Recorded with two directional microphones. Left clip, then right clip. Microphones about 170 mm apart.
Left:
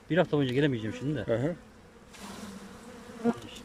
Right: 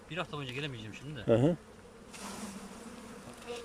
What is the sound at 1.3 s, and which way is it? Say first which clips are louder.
Speech: right 3 dB; 10° right (ahead or behind).